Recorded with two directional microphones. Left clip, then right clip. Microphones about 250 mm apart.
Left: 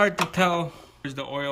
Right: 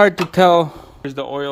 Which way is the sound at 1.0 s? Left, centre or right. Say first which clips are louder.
Right 7 dB; centre.